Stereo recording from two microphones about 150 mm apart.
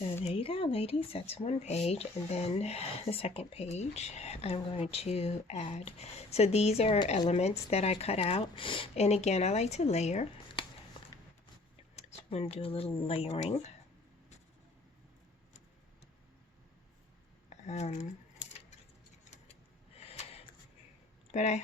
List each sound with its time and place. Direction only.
0.3 s speech: 40° left (ahead or behind)
11.9 s speech: 45° left (ahead or behind)
17.5 s speech: 50° left (ahead or behind)
20.0 s a sound: 40° left (ahead or behind)
21.3 s speech: 50° left (ahead or behind)